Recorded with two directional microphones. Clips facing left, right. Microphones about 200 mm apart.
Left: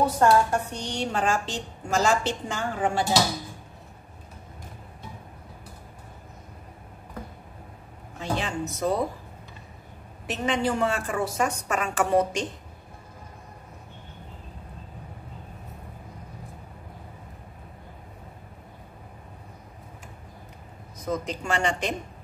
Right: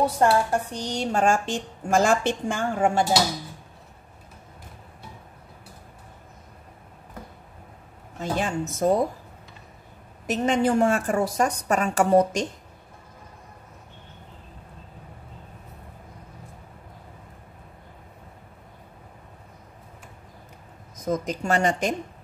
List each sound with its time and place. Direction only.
0.0 s a woman's voice: 30° right (ahead or behind); by 3.0 s 50° right (ahead or behind)
8.2 s a woman's voice: 45° right (ahead or behind)
10.2 s a woman's voice: 45° right (ahead or behind)
21.0 s a woman's voice: 45° right (ahead or behind)